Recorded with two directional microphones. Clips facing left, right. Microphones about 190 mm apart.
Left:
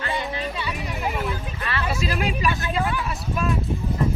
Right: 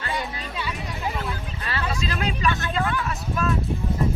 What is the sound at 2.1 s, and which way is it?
Speech, 10° left (ahead or behind).